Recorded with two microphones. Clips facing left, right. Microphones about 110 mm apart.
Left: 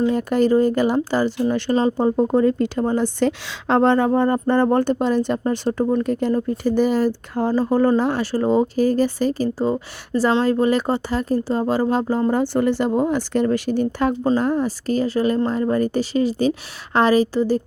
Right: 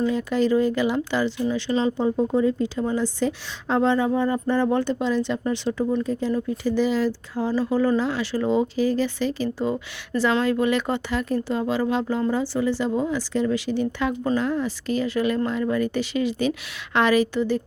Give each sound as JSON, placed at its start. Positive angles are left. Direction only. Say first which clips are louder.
{"t": 0.0, "sound": "speech", "louder": "left 4 dB", "side_deg": 50}
{"t": 1.4, "sound": "speech", "louder": "left 4 dB", "side_deg": 55}
{"t": 6.1, "sound": "speech", "louder": "left 4 dB", "side_deg": 60}
{"t": 12.3, "sound": "speech", "louder": "left 4 dB", "side_deg": 55}